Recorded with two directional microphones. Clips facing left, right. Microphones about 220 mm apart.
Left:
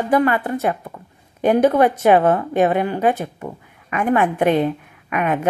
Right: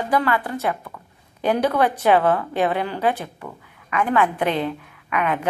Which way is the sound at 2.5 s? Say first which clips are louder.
Left 5 dB; 45° left (ahead or behind).